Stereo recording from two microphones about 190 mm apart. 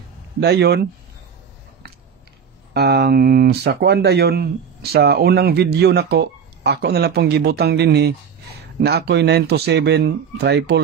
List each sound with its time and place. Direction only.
0.4 s speech: 60° right (ahead or behind)
2.7 s speech: 60° right (ahead or behind)